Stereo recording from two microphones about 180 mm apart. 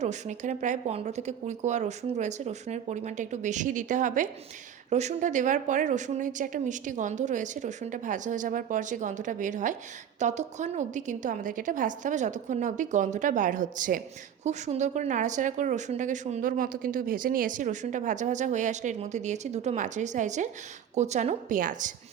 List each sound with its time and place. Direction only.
0.0 s speech: 40° right (ahead or behind)